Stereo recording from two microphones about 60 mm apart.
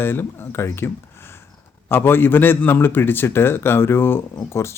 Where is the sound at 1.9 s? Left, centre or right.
Left.